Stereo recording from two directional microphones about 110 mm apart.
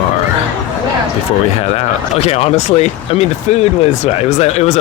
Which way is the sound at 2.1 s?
70° left (ahead or behind).